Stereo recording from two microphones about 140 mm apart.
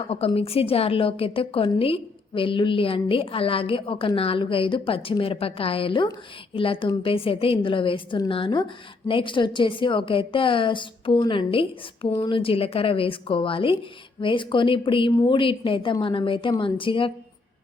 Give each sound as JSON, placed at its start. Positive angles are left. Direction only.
{"t": 0.1, "sound": "a woman's voice", "side_deg": 45}
{"t": 12.1, "sound": "speech", "side_deg": 30}
{"t": 12.4, "sound": "a woman's voice", "side_deg": 40}